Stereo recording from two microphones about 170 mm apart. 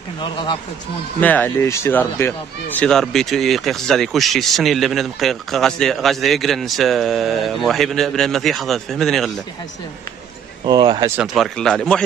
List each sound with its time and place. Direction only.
0.2 s speech: 30° left (ahead or behind)
1.2 s speech: 10° left (ahead or behind)
10.6 s speech: 30° right (ahead or behind)
11.1 s speech: centre (ahead or behind)